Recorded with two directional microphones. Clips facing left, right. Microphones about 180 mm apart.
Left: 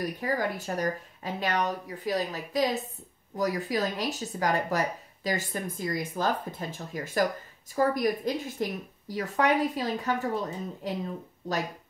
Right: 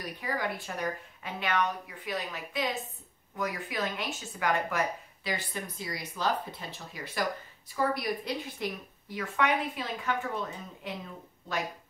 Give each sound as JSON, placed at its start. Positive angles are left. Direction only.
{"t": 0.0, "sound": "speech", "side_deg": 40}